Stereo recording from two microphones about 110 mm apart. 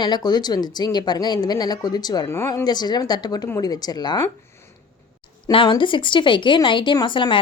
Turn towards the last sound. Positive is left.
turn(degrees=45)  # may be behind; listen again after turning